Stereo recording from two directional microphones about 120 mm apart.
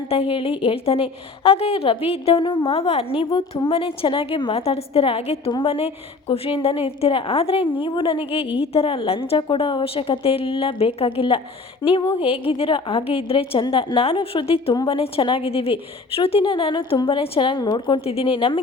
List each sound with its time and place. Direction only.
0.1 s a woman's voice: 50° left (ahead or behind)